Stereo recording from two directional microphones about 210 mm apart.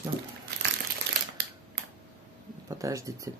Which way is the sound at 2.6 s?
15° right (ahead or behind).